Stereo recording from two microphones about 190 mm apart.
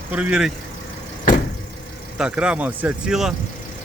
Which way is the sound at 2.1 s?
5° right (ahead or behind).